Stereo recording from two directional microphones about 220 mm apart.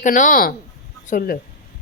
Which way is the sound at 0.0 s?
35° left (ahead or behind).